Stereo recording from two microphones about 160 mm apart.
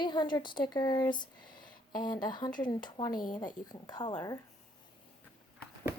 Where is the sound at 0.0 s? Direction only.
25° left (ahead or behind).